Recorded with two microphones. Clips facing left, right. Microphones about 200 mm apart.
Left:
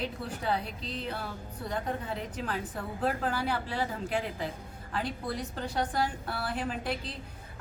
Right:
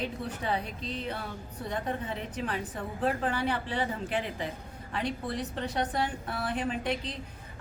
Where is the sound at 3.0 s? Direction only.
5° left (ahead or behind).